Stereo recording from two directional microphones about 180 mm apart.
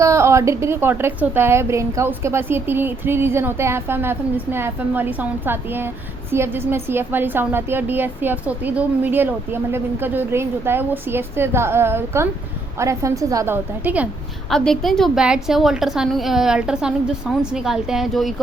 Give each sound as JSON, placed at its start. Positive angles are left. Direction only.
{"t": 0.0, "sound": "a woman's voice", "side_deg": -15}
{"t": 14.5, "sound": "a woman's voice", "side_deg": 0}